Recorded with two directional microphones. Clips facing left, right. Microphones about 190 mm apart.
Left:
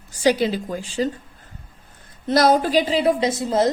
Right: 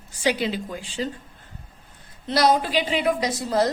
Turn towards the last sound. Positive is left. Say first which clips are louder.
# left 3 dB
turn(degrees=20)  # may be behind; listen again after turning